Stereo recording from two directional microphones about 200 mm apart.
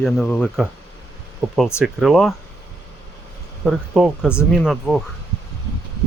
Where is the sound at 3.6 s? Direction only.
5° right (ahead or behind).